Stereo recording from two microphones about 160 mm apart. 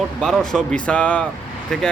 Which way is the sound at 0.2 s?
5° left (ahead or behind).